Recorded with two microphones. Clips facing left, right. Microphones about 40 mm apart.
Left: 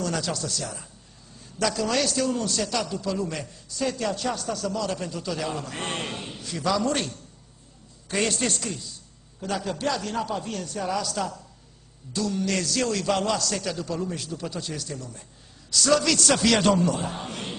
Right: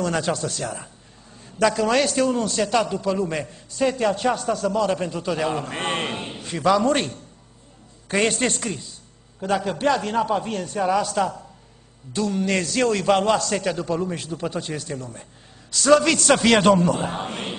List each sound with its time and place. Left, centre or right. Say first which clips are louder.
0.0 s a man's voice: right 5 dB; right